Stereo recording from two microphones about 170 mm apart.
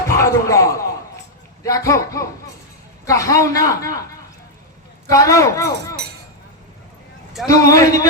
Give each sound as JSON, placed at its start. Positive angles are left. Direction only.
{"t": 0.1, "sound": "speech", "side_deg": 20}
{"t": 5.0, "sound": "speech", "side_deg": 20}
{"t": 7.4, "sound": "speech", "side_deg": 20}